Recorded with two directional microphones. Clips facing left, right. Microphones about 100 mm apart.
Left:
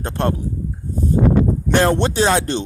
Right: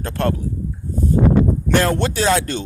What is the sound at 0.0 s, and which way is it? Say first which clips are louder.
Speech: even; 20° left (ahead or behind).